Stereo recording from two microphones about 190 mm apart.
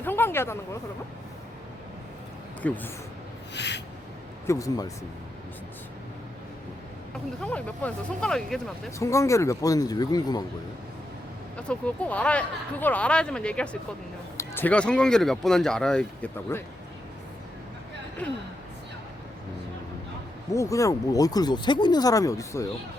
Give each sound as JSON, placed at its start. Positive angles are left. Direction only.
{"t": 0.0, "sound": "a sound", "side_deg": 10}
{"t": 2.6, "sound": "speech", "side_deg": 10}
{"t": 3.5, "sound": "a sound", "side_deg": 65}
{"t": 4.4, "sound": "speech", "side_deg": 15}
{"t": 7.4, "sound": "speech", "side_deg": 5}
{"t": 9.0, "sound": "speech", "side_deg": 15}
{"t": 11.5, "sound": "speech", "side_deg": 5}
{"t": 20.5, "sound": "speech", "side_deg": 15}